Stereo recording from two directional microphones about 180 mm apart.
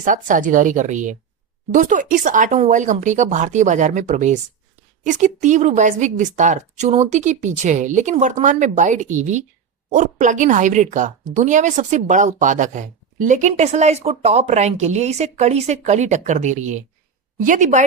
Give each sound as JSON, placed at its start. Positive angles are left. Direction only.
{"t": 0.0, "sound": "a woman's voice", "side_deg": -45}